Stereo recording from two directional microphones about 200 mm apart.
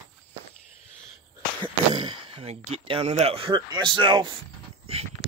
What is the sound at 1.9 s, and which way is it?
Speech, 25° right (ahead or behind).